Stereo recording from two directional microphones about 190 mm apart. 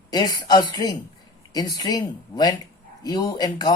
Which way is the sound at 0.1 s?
20° left (ahead or behind).